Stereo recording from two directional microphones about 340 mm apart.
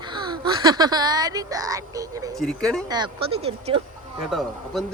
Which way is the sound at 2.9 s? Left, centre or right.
Centre.